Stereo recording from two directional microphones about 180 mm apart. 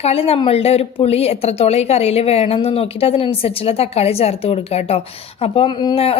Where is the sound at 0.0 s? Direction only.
35° left (ahead or behind).